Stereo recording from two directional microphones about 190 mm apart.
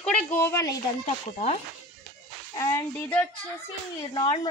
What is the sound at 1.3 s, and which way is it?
Speech, 35° left (ahead or behind).